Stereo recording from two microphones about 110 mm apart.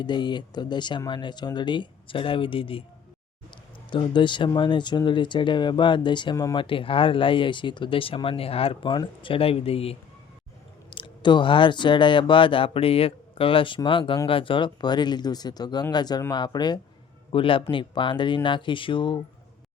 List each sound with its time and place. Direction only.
0.0 s speech: 45° left (ahead or behind)
3.8 s speech: 45° left (ahead or behind)
6.3 s speech: 30° left (ahead or behind)
6.6 s speech: 50° left (ahead or behind)
10.9 s speech: 45° left (ahead or behind)
17.3 s speech: 50° left (ahead or behind)